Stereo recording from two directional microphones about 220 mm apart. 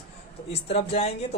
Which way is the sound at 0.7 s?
30° left (ahead or behind).